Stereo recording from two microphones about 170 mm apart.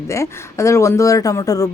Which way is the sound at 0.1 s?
15° left (ahead or behind).